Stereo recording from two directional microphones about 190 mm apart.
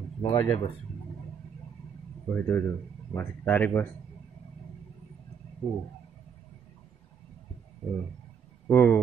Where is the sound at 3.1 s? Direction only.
10° left (ahead or behind).